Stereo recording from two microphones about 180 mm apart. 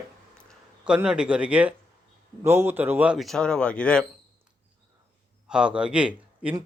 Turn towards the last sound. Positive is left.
turn(degrees=-5)  # may be behind; listen again after turning